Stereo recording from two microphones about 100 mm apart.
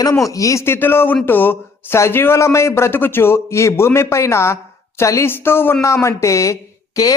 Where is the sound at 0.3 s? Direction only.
35° left (ahead or behind).